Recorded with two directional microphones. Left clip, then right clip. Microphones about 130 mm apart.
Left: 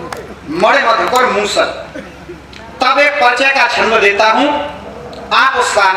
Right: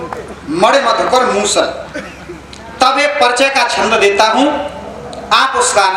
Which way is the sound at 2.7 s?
15° right (ahead or behind).